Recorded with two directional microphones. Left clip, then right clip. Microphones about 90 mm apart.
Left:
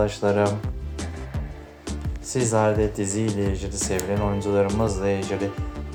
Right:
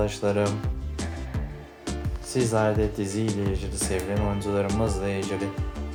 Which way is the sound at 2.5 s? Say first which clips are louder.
Left 4 dB; 35° left (ahead or behind).